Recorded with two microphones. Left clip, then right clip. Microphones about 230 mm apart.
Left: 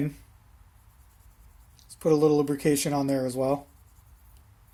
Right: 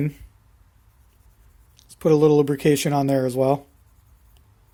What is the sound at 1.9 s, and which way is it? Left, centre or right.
Speech, right.